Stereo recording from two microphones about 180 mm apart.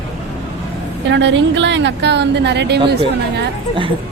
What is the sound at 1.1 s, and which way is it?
Speech, 90° right.